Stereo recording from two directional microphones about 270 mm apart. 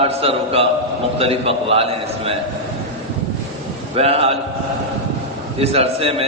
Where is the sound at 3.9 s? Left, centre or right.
Right.